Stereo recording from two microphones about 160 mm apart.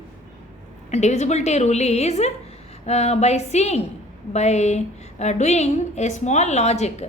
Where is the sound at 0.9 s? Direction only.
45° left (ahead or behind).